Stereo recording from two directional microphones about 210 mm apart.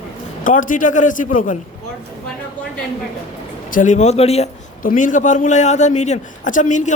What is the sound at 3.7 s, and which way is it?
A man's voice, 40° left (ahead or behind).